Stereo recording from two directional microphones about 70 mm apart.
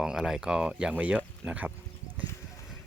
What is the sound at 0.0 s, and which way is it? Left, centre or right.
Speech, centre.